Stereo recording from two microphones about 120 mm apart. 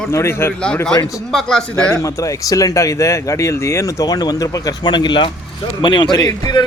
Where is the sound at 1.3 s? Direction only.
5° left (ahead or behind).